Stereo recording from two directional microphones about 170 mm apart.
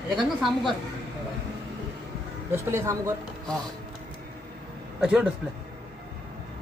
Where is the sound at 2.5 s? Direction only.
15° right (ahead or behind).